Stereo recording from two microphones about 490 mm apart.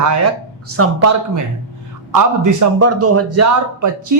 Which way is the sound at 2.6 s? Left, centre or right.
Right.